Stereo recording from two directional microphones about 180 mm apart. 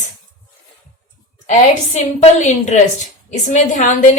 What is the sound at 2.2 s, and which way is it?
A woman's voice, 40° left (ahead or behind).